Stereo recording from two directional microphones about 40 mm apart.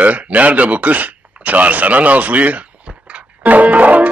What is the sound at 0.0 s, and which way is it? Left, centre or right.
Speech, right.